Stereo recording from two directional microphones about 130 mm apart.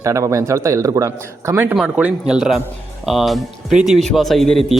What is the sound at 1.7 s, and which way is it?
Speech, 5° right (ahead or behind).